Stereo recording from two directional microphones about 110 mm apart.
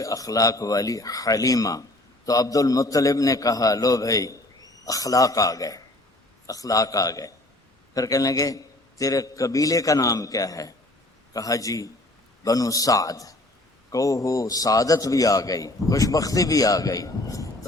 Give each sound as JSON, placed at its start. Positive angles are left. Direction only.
{"t": 0.0, "sound": "a man's voice", "side_deg": 30}